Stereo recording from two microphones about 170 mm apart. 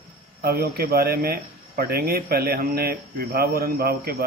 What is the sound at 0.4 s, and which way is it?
Speech, 65° right (ahead or behind).